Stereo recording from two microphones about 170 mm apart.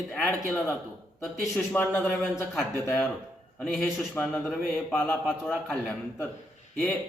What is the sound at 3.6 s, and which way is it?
A man's voice, 5° left (ahead or behind).